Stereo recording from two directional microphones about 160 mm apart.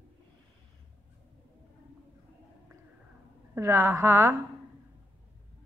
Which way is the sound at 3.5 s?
15° right (ahead or behind).